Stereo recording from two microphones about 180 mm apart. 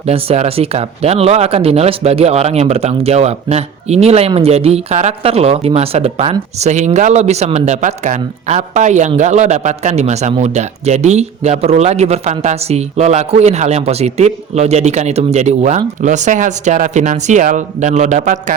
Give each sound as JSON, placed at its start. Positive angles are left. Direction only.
{"t": 0.0, "sound": "speech", "side_deg": -35}